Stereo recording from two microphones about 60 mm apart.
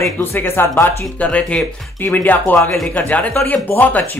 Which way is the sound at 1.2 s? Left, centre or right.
Left.